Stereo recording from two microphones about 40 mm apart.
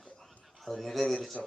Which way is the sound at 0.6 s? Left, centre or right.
Centre.